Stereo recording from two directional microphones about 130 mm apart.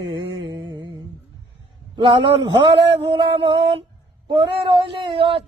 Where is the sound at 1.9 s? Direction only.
35° right (ahead or behind).